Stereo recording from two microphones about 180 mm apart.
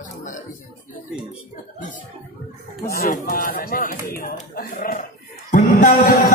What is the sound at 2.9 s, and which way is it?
Speech, 55° left (ahead or behind).